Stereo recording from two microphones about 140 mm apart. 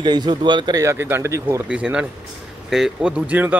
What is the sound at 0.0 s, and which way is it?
Speech, 30° right (ahead or behind).